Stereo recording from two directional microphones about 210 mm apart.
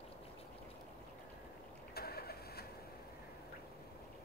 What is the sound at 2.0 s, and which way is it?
Vehicle, 45° left (ahead or behind).